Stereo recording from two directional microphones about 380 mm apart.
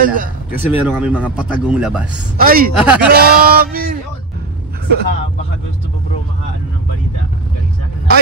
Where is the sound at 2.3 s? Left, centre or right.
Right.